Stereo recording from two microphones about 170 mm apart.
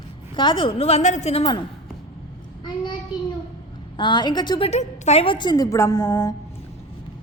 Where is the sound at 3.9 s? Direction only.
25° left (ahead or behind).